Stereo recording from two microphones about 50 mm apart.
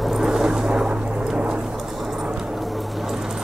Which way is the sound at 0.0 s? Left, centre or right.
Centre.